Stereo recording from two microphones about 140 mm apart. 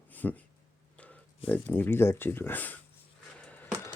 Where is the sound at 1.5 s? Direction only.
15° left (ahead or behind).